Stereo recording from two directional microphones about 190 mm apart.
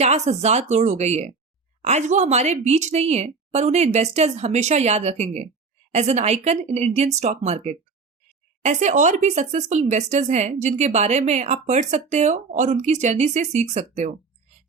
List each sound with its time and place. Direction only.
0.0 s speech: 35° right (ahead or behind)